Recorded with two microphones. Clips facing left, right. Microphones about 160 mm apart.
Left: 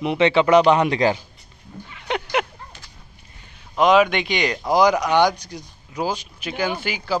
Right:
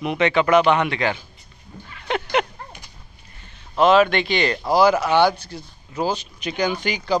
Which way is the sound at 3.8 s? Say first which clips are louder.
Right 1 dB; 15° left (ahead or behind).